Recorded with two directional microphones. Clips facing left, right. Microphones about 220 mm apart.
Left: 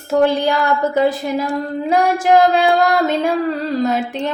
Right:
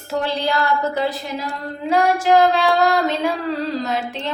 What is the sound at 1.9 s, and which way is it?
A woman's voice, 50° left (ahead or behind).